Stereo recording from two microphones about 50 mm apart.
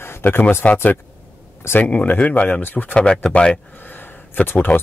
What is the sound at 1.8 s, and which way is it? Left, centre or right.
Speech, left.